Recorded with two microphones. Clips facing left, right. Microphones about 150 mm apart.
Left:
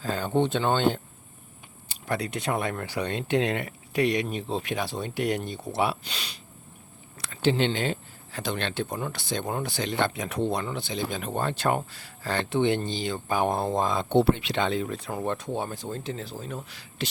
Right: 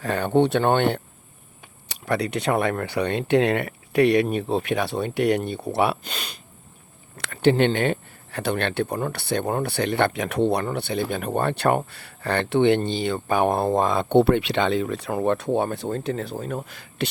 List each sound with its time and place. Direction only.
0.0 s speech: 70° right (ahead or behind); by 17.1 s 55° right (ahead or behind)